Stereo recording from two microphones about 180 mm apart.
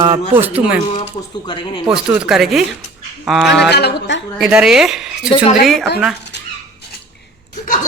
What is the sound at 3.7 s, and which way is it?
Speech, 65° left (ahead or behind).